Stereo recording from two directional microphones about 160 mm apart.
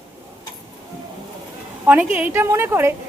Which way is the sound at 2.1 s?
10° right (ahead or behind).